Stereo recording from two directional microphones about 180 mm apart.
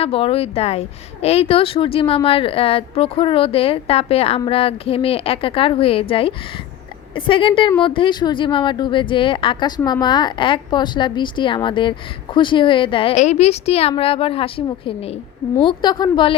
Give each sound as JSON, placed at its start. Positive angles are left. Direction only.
{"t": 0.0, "sound": "speech", "side_deg": 30}